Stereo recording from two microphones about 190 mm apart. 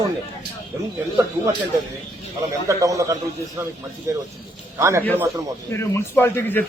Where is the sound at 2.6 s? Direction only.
15° right (ahead or behind).